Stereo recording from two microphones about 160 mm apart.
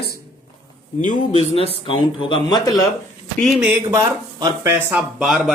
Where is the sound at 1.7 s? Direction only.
35° left (ahead or behind).